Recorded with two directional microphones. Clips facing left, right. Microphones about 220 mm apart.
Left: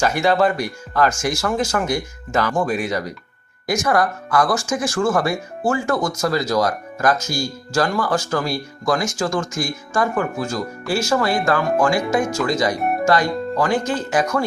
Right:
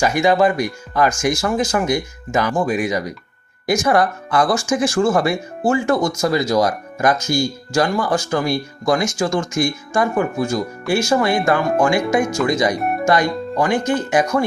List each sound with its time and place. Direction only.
0.0 s speech: 15° right (ahead or behind)
3.7 s speech: 25° right (ahead or behind)